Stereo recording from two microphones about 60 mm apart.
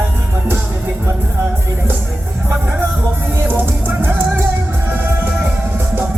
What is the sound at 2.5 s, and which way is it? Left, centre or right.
Music, right.